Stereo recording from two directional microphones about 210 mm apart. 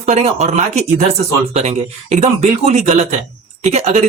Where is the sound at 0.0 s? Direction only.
30° right (ahead or behind).